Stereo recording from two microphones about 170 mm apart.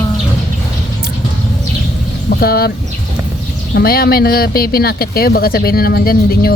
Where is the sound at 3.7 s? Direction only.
65° left (ahead or behind).